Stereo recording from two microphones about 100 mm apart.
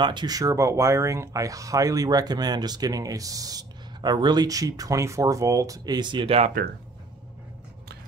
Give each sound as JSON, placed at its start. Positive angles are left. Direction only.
{"t": 0.0, "sound": "speech", "side_deg": -50}
{"t": 6.2, "sound": "speech", "side_deg": -85}